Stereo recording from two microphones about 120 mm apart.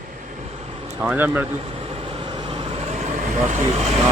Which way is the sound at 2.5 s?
60° right (ahead or behind).